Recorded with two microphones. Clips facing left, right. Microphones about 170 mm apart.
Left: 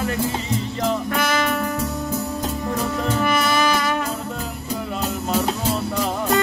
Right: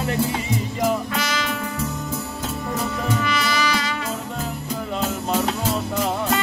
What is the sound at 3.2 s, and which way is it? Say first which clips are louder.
Music: left 7 dB; 50° left (ahead or behind).